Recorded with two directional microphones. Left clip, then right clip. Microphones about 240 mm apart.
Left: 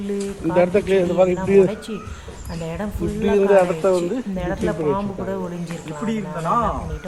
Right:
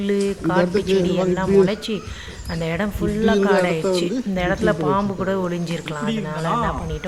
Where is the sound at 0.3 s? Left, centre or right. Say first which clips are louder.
Left 1 dB; centre.